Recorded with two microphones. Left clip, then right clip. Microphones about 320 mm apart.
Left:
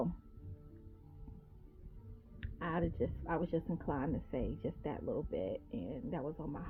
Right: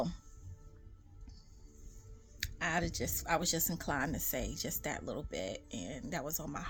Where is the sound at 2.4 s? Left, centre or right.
Centre.